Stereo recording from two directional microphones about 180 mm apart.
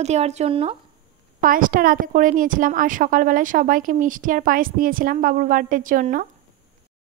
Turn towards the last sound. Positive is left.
turn(degrees=-50)  # may be behind; listen again after turning